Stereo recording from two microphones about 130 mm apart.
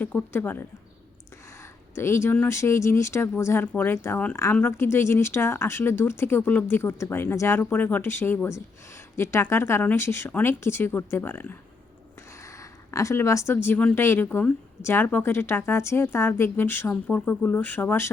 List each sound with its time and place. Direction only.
0.0 s a woman's voice: 15° left (ahead or behind)
2.0 s a woman's voice: 20° left (ahead or behind)